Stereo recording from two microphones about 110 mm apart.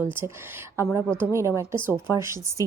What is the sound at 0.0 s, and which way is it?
Speech, 20° right (ahead or behind).